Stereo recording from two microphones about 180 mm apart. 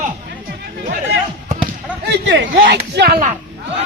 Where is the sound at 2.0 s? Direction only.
70° right (ahead or behind).